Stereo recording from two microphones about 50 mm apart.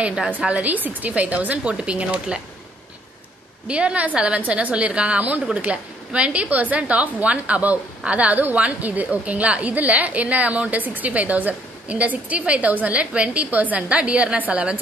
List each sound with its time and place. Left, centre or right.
0.5 s a woman's voice: right
3.6 s a woman's voice: right